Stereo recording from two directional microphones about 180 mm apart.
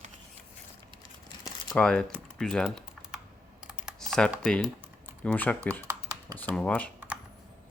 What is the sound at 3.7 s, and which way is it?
Typing, 5° right (ahead or behind).